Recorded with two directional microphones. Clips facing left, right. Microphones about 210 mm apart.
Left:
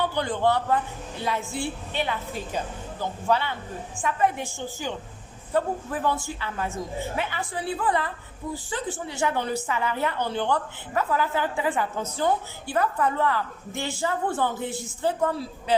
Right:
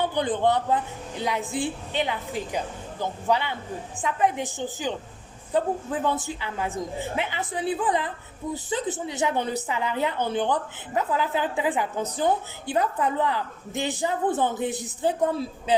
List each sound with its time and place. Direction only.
0.0 s a woman's voice: 20° right (ahead or behind)